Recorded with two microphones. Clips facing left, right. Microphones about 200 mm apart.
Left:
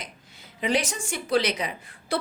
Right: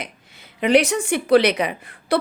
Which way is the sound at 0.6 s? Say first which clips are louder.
Right 9 dB; 65° right (ahead or behind).